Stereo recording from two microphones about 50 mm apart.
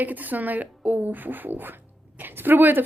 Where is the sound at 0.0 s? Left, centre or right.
Right.